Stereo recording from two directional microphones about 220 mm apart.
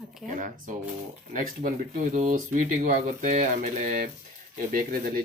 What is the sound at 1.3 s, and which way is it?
Speech, 40° right (ahead or behind).